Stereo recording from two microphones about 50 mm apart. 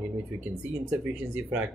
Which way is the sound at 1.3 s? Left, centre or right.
Right.